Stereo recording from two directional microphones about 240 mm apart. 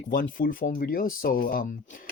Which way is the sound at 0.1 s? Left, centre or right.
Left.